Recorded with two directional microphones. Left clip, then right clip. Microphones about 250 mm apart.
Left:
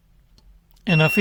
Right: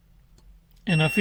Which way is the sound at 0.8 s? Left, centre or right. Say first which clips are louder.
Left 5 dB; left.